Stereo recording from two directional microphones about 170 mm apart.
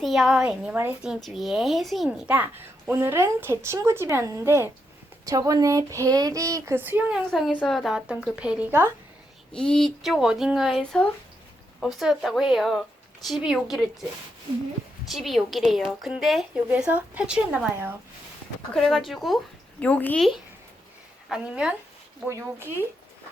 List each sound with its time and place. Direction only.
0.0 s speech: centre (ahead or behind)
7.3 s a woman's voice: centre (ahead or behind)
9.5 s a woman's voice: 5° left (ahead or behind)
15.0 s a woman's voice: centre (ahead or behind)
18.7 s a woman's voice: centre (ahead or behind)
21.2 s a woman's voice: 5° right (ahead or behind)